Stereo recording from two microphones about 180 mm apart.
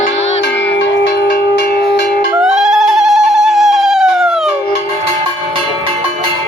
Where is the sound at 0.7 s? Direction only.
70° left (ahead or behind).